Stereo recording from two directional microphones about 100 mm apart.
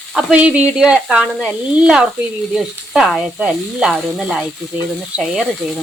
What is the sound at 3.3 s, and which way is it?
Speech, 5° right (ahead or behind).